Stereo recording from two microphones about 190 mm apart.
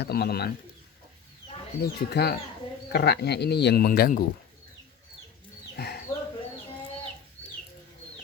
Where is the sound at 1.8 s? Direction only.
55° left (ahead or behind).